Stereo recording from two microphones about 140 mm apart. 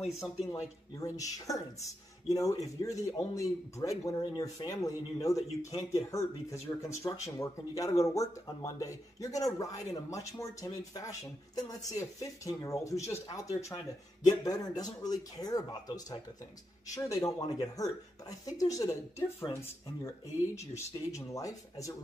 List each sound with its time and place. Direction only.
0.0 s a man's voice: centre (ahead or behind)
0.5 s speech: 25° left (ahead or behind)